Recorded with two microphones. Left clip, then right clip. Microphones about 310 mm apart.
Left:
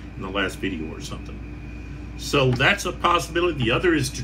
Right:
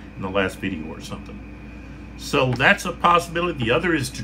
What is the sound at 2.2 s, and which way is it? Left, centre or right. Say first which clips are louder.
A man's voice: right 1 dB; right.